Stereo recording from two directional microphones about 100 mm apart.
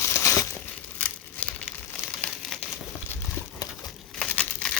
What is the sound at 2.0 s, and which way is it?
Crumpling, 25° left (ahead or behind).